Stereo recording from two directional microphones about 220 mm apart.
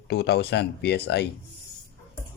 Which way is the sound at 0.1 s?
45° left (ahead or behind).